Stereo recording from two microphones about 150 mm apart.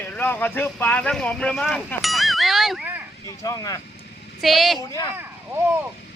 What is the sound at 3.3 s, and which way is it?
Speech, 25° left (ahead or behind).